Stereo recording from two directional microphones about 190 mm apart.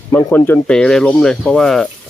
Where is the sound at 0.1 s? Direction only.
15° left (ahead or behind).